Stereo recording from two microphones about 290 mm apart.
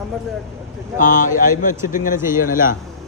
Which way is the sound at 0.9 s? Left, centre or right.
Left.